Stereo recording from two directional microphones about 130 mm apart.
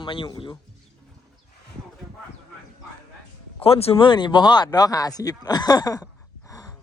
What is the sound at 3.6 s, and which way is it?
Speech, 50° left (ahead or behind).